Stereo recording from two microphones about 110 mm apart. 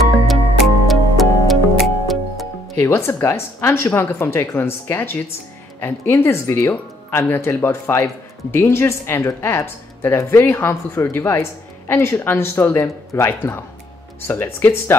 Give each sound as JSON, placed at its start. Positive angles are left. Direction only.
{"t": 0.8, "sound": "music", "side_deg": 0}
{"t": 2.8, "sound": "speech", "side_deg": 20}